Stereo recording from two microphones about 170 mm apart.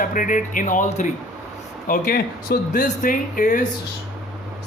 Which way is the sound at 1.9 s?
60° left (ahead or behind).